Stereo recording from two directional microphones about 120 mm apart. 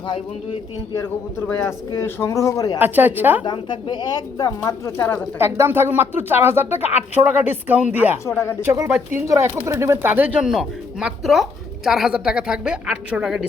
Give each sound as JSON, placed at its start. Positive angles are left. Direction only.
{"t": 1.5, "sound": "speech", "side_deg": 20}
{"t": 2.7, "sound": "a woman's voice", "side_deg": -15}
{"t": 3.4, "sound": "speech", "side_deg": 40}
{"t": 5.4, "sound": "speech", "side_deg": -20}
{"t": 8.3, "sound": "speech", "side_deg": 20}
{"t": 8.6, "sound": "speech", "side_deg": -25}
{"t": 10.5, "sound": "a woman's voice", "side_deg": 0}